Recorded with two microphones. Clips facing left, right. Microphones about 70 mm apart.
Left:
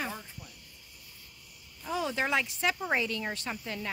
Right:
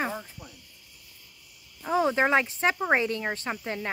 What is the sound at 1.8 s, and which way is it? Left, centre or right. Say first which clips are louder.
Speech: right 8 dB; right.